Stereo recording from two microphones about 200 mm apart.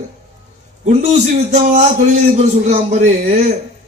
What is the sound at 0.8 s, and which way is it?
A man's voice, 35° right (ahead or behind).